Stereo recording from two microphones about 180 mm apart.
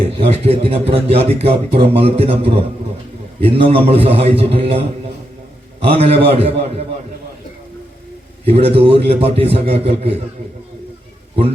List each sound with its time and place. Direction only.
0.2 s speech: 35° right (ahead or behind)
5.9 s speech: 35° right (ahead or behind)
8.4 s speech: 35° right (ahead or behind)